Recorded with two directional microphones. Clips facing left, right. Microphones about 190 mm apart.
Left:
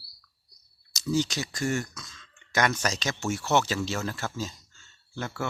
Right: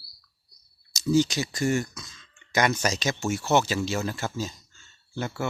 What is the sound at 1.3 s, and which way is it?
Speech, 15° right (ahead or behind).